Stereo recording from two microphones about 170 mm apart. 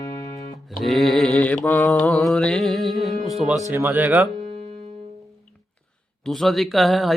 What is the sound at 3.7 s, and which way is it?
Speech, 10° right (ahead or behind).